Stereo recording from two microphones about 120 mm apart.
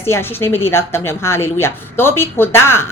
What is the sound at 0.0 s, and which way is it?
A woman's voice, 20° left (ahead or behind).